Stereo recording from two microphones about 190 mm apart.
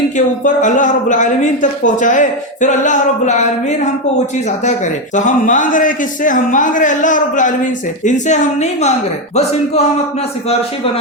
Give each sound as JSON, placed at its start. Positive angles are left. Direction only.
{"t": 0.4, "sound": "speech", "side_deg": 45}
{"t": 5.1, "sound": "a man's voice", "side_deg": 40}